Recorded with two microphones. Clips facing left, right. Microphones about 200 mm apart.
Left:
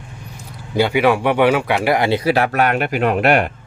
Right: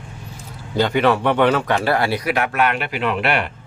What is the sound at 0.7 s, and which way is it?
Speech, 10° left (ahead or behind).